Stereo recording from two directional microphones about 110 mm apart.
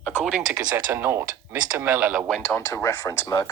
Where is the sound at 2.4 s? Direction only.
25° left (ahead or behind).